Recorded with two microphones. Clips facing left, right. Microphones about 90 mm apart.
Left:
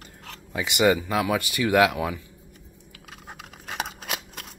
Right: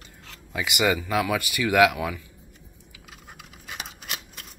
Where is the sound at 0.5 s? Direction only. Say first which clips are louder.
Left 3 dB; 30° left (ahead or behind).